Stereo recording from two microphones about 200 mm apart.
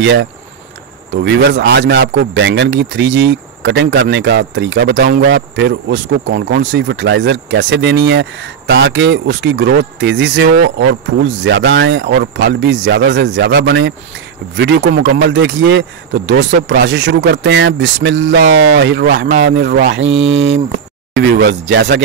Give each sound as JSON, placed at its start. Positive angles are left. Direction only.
{"t": 0.0, "sound": "speech", "side_deg": -65}
{"t": 20.2, "sound": "speech", "side_deg": -70}
{"t": 21.1, "sound": "speech", "side_deg": -60}